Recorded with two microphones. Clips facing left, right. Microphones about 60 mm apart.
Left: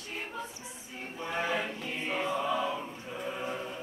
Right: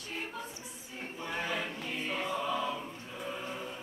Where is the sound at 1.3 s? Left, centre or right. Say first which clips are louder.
Left 4 dB; centre.